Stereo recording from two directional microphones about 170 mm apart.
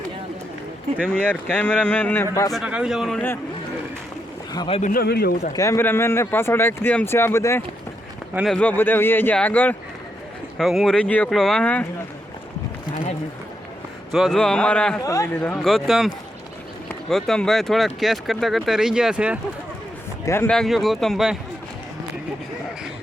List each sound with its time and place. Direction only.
1.0 s speech: 10° left (ahead or behind)
2.5 s speech: 5° right (ahead or behind)
4.5 s speech: 30° left (ahead or behind)
4.8 s speech: 60° left (ahead or behind)
5.5 s speech: 15° left (ahead or behind)
8.3 s speech: 5° right (ahead or behind)
8.5 s speech: 10° left (ahead or behind)
14.1 s speech: centre (ahead or behind)
14.9 s speech: 20° left (ahead or behind)
15.4 s speech: centre (ahead or behind)
20.2 s speech: 15° left (ahead or behind)
20.5 s speech: centre (ahead or behind)